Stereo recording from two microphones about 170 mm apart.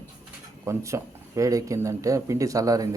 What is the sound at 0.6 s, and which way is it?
Speech, 15° right (ahead or behind).